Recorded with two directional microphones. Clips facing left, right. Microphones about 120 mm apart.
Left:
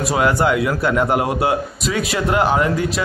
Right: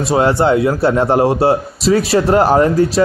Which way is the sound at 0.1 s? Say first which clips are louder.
Right 5 dB; 30° right (ahead or behind).